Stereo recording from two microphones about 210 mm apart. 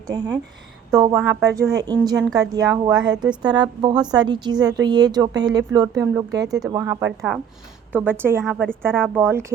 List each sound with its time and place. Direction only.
0.9 s a woman's voice: 15° right (ahead or behind)
8.4 s a woman's voice: centre (ahead or behind)
9.2 s a woman's voice: 10° right (ahead or behind)